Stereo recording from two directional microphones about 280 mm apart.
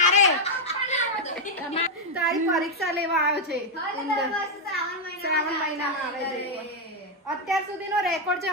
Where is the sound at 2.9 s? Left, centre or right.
Right.